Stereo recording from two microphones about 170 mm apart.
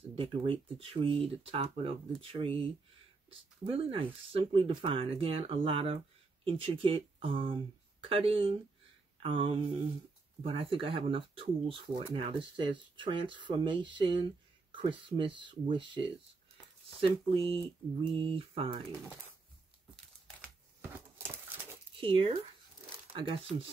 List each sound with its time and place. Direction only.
0.1 s speech: 30° right (ahead or behind)
21.2 s a sound: 15° right (ahead or behind)
21.9 s speech: 30° right (ahead or behind)